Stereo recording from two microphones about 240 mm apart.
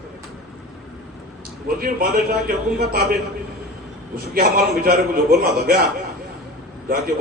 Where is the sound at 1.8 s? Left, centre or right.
Right.